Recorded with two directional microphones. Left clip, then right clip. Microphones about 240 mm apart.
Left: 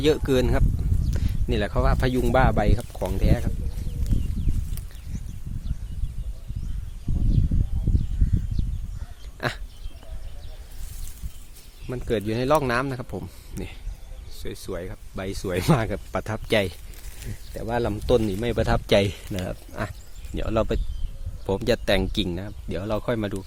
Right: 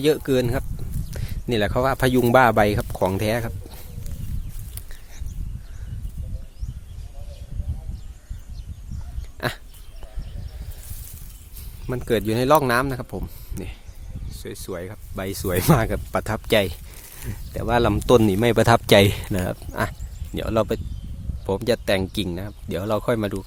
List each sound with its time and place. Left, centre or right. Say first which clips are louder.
0.0 s speech: right 1 dB; centre; by 3.5 s right
9.4 s a sound: right 1 dB; centre
11.9 s speech: right 4 dB; right
17.5 s speech: right 6 dB; right